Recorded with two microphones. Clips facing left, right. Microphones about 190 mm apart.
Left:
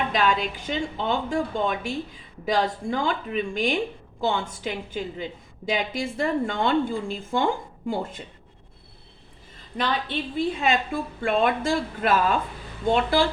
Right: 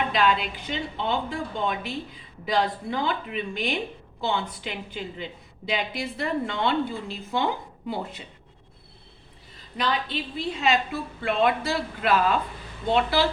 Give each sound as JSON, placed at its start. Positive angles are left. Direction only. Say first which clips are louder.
{"t": 0.1, "sound": "a woman's voice", "louder": "even", "side_deg": 45}
{"t": 10.3, "sound": "a woman's voice", "louder": "left 1 dB", "side_deg": 50}